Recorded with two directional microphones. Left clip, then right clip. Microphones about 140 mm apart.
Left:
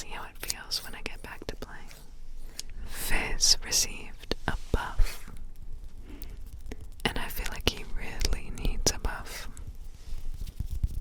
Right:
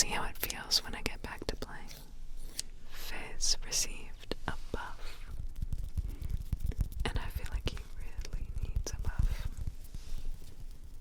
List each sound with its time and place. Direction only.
0.0 s whispering: 30° right (ahead or behind); by 1.9 s 5° right (ahead or behind)
2.8 s whispering: 40° left (ahead or behind)
6.7 s whispering: 35° left (ahead or behind)
7.9 s whispering: 75° left (ahead or behind); by 9.5 s 45° left (ahead or behind)